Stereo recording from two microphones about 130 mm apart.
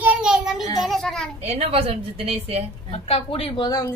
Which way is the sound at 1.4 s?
50° right (ahead or behind).